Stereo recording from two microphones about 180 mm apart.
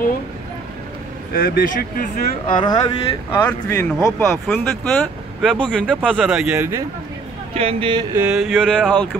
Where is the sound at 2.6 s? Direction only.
25° left (ahead or behind).